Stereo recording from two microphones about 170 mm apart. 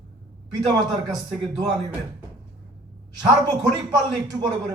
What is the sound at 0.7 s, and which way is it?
Speech, 25° right (ahead or behind).